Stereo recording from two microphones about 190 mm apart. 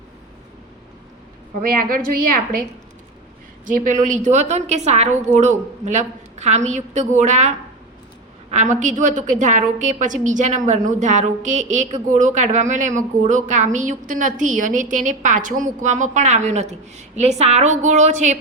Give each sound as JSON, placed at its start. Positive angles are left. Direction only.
{"t": 1.6, "sound": "a woman's voice", "side_deg": -50}
{"t": 3.7, "sound": "a woman's voice", "side_deg": -45}